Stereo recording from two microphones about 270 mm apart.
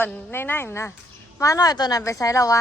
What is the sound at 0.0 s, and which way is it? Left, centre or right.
A woman's voice, centre.